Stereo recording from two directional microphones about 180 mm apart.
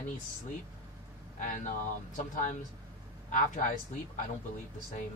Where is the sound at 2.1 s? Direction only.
45° left (ahead or behind).